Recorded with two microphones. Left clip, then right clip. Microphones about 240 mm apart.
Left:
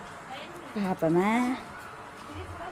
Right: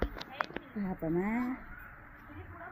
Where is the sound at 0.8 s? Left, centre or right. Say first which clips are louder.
Left 9 dB; left.